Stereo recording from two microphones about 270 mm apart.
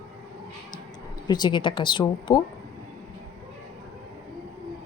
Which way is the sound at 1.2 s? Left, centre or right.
Centre.